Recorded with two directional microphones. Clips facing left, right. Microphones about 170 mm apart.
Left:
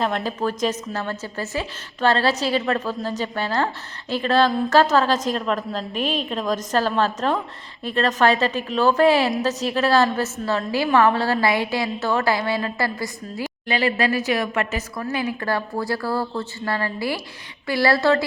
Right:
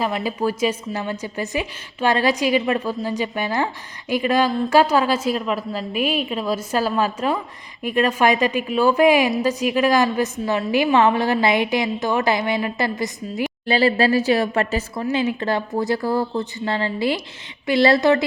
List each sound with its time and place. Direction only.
0.0 s a woman's voice: 10° right (ahead or behind)
13.7 s a woman's voice: 35° right (ahead or behind)